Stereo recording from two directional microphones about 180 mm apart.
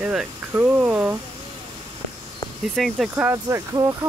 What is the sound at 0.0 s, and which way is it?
Speech, 5° right (ahead or behind).